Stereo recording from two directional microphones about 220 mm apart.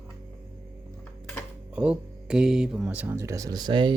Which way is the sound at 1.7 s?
5° right (ahead or behind).